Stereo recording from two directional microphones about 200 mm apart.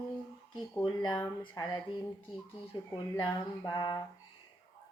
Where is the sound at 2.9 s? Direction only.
20° left (ahead or behind).